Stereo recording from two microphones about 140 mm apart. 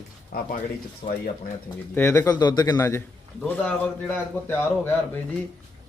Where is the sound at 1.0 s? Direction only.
45° left (ahead or behind).